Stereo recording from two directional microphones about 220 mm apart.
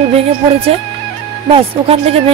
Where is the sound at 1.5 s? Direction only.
25° right (ahead or behind).